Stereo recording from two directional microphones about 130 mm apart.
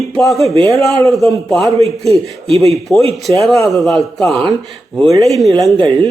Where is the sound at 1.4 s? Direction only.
Centre (ahead or behind).